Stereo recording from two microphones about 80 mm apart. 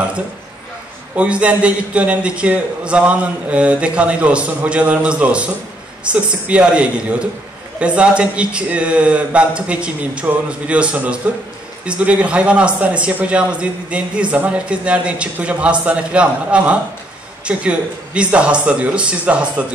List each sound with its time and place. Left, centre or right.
1.1 s a man's voice: centre